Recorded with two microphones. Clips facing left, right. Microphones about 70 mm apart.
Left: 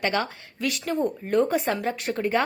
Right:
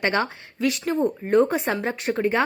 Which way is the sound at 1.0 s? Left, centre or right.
Right.